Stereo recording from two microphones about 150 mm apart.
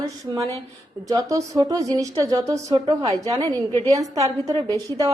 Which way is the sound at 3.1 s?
25° right (ahead or behind).